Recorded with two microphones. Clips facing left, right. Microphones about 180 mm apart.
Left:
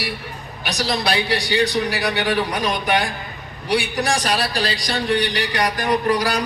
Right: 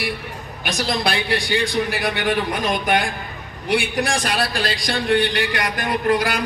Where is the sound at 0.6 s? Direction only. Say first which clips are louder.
Even; 50° right (ahead or behind).